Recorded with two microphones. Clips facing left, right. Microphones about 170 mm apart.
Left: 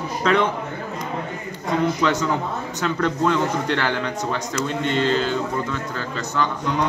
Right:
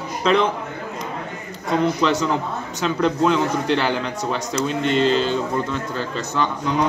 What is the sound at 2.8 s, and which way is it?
A man's voice, 15° right (ahead or behind).